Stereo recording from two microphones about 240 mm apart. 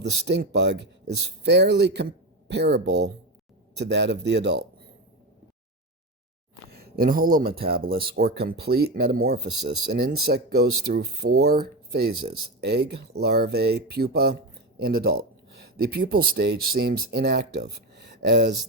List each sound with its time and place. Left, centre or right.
0.0 s speech: right
6.7 s speech: right